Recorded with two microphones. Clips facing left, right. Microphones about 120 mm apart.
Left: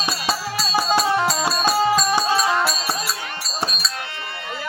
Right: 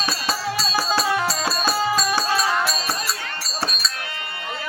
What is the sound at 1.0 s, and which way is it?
Music, 30° left (ahead or behind).